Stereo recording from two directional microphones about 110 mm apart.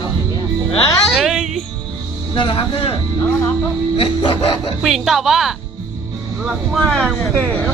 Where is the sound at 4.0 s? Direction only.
50° left (ahead or behind).